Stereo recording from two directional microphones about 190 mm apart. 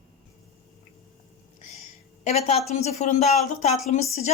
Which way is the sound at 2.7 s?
35° left (ahead or behind).